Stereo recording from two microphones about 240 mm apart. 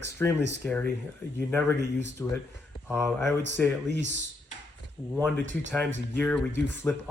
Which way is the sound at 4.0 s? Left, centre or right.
Right.